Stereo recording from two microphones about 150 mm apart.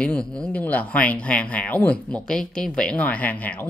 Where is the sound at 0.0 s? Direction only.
5° left (ahead or behind).